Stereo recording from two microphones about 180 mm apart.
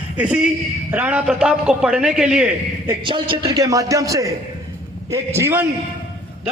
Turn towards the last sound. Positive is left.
turn(degrees=-15)  # may be behind; listen again after turning